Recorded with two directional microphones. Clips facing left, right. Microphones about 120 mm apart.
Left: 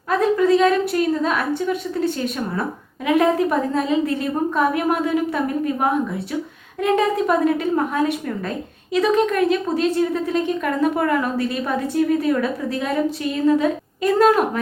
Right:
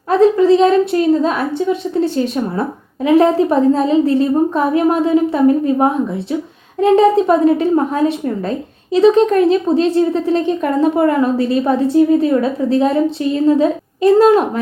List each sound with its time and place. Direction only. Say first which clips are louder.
0.1 s a woman's voice: right 6 dB; 30° right (ahead or behind)